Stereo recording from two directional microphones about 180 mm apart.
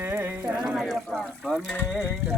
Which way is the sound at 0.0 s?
10° right (ahead or behind).